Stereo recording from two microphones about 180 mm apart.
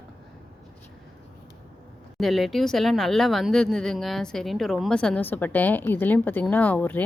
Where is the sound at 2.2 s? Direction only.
Centre (ahead or behind).